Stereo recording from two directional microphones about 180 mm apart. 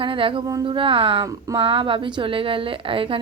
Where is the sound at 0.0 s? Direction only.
30° right (ahead or behind).